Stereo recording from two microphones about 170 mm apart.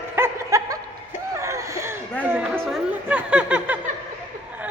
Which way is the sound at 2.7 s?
10° right (ahead or behind).